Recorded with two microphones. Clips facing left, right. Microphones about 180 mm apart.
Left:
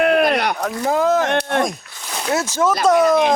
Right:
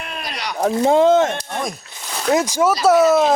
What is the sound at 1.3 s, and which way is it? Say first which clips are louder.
Speech: left 7 dB; 70° left (ahead or behind).